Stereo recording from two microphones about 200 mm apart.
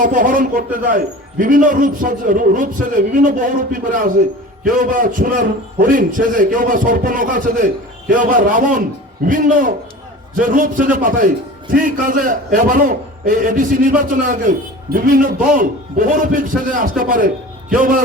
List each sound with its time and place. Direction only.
0.0 s a man's voice: 40° right (ahead or behind)